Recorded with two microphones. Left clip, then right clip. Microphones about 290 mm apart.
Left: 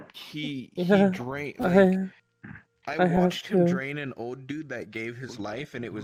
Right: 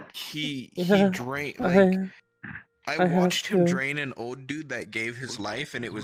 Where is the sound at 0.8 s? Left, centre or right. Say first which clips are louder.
Even; centre.